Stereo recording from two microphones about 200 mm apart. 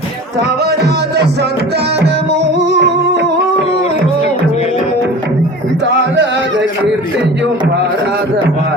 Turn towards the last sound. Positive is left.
turn(degrees=-60)  # may be behind; listen again after turning